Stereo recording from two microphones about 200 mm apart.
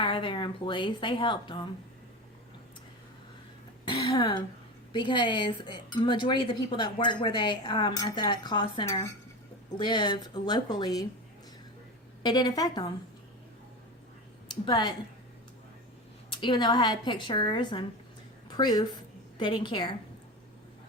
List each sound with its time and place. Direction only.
0.0 s speech: 25° left (ahead or behind)
3.8 s speech: 25° left (ahead or behind)
12.2 s speech: 20° left (ahead or behind)
14.6 s speech: 20° left (ahead or behind)
16.3 s a woman's voice: 20° left (ahead or behind)